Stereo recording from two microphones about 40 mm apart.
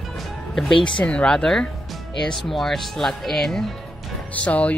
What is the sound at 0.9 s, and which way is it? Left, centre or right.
Speech, left.